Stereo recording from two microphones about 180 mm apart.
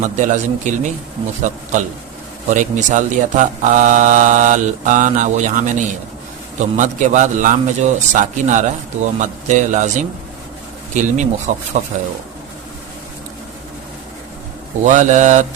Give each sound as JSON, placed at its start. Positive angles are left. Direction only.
{"t": 0.0, "sound": "speech", "side_deg": -45}
{"t": 14.8, "sound": "speech", "side_deg": -45}